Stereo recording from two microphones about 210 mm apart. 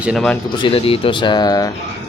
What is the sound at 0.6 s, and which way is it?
Speech, 25° left (ahead or behind).